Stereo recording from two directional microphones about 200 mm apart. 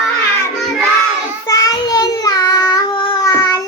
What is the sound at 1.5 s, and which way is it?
Child singing, 15° left (ahead or behind).